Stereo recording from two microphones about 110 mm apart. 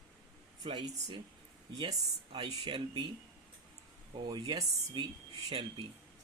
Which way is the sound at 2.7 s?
50° right (ahead or behind).